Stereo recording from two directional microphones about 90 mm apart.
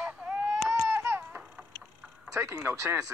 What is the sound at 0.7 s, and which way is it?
Baby cry, 30° right (ahead or behind).